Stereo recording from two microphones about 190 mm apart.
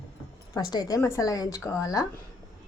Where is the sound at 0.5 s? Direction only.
20° left (ahead or behind).